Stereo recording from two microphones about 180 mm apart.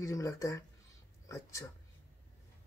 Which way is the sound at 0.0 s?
15° left (ahead or behind).